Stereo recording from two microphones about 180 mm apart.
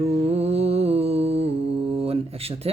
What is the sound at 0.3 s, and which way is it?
Mantra, 35° right (ahead or behind).